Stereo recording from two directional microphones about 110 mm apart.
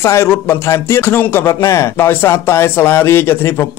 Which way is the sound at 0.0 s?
25° left (ahead or behind).